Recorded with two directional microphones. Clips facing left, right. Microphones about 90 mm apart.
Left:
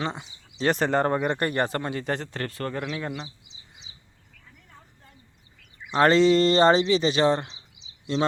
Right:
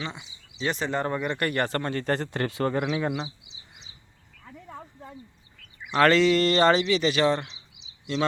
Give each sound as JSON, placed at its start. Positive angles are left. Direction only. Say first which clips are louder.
{"t": 0.0, "sound": "speech", "louder": "left 5 dB", "side_deg": 45}
{"t": 4.4, "sound": "a sound", "louder": "right 12 dB", "side_deg": -90}
{"t": 5.9, "sound": "speech", "louder": "left 1 dB", "side_deg": 30}